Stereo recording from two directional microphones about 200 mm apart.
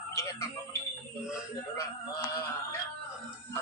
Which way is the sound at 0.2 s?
15° left (ahead or behind).